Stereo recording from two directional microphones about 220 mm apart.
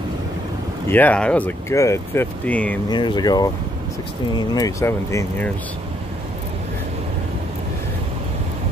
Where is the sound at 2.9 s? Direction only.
20° left (ahead or behind).